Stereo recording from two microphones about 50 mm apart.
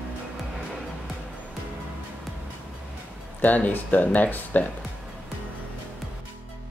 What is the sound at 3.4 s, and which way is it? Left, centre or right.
Speech, left.